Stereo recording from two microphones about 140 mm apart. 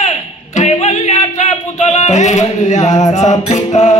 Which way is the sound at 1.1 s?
55° left (ahead or behind).